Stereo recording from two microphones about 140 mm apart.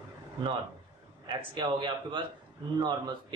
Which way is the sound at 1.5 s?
30° right (ahead or behind).